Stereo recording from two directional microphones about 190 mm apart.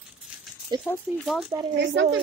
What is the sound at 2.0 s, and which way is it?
Speech, 80° right.